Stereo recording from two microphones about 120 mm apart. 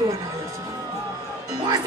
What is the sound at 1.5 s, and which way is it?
Music, 40° right (ahead or behind).